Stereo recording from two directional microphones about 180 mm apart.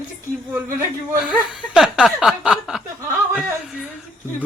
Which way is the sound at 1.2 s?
5° right (ahead or behind).